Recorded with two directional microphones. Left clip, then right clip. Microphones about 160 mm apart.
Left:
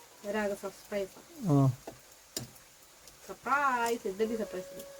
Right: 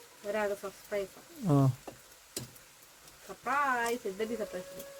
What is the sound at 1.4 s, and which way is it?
Speech, 15° right (ahead or behind).